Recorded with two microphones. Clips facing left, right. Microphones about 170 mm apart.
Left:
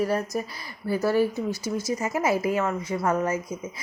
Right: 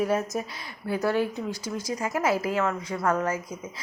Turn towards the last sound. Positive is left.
turn(degrees=10)  # may be behind; listen again after turning